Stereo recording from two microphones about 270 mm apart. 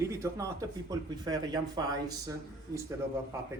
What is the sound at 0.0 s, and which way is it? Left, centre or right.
Speech, centre.